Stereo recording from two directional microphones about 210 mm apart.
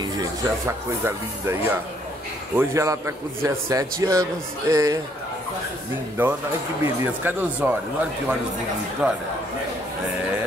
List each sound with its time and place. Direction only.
0.0 s a sound: 15° right (ahead or behind)
1.0 s a man's voice: 10° right (ahead or behind)
6.2 s a man's voice: 10° right (ahead or behind)